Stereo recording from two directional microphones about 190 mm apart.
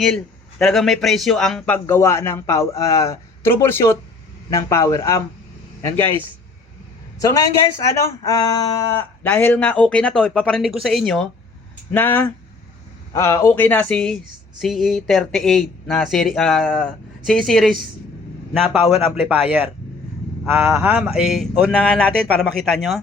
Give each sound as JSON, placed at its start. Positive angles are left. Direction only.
{"t": 0.6, "sound": "a man's voice", "side_deg": 0}
{"t": 7.2, "sound": "a man's voice", "side_deg": 15}